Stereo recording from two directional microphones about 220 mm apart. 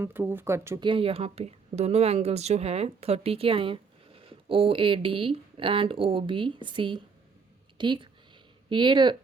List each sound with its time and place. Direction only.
0.0 s speech: 10° right (ahead or behind)